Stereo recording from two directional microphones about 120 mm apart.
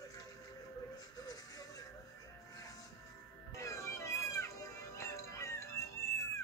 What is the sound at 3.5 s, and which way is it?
Music, 25° left (ahead or behind).